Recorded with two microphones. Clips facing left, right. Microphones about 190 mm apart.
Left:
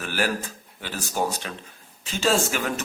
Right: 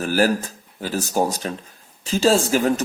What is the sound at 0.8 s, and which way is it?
Speech, 40° right (ahead or behind).